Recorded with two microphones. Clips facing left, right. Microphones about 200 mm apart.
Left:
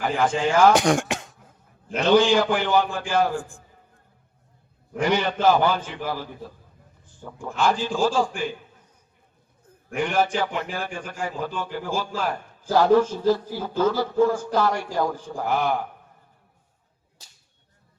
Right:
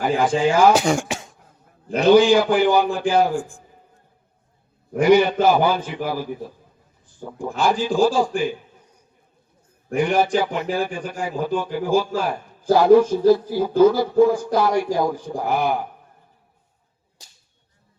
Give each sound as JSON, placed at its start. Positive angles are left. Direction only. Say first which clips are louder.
{"t": 0.0, "sound": "speech", "louder": "right 4 dB", "side_deg": -10}
{"t": 2.0, "sound": "speech", "louder": "right 4 dB", "side_deg": -10}
{"t": 4.9, "sound": "speech", "louder": "right 8 dB", "side_deg": -10}
{"t": 7.2, "sound": "speech", "louder": "right 5 dB", "side_deg": -45}
{"t": 7.6, "sound": "speech", "louder": "right 4 dB", "side_deg": -15}
{"t": 10.0, "sound": "speech", "louder": "right 4 dB", "side_deg": -15}